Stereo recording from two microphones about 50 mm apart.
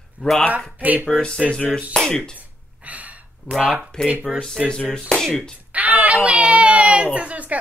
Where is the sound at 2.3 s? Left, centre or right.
Right.